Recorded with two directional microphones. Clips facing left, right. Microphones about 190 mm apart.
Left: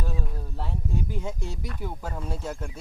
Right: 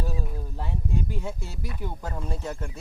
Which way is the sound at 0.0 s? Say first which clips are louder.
Right 2 dB; 5° right (ahead or behind).